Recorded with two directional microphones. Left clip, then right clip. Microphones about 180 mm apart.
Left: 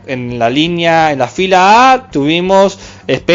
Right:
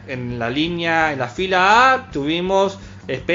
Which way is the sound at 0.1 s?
45° left (ahead or behind).